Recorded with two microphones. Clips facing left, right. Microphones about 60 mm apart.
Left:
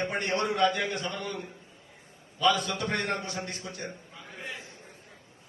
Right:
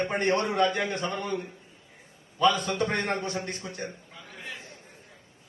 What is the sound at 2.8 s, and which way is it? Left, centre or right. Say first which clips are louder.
A man's voice: right 3 dB; right.